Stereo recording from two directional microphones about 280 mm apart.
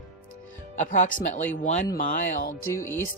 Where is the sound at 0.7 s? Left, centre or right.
Left.